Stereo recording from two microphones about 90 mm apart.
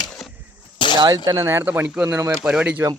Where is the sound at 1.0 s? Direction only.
45° right (ahead or behind).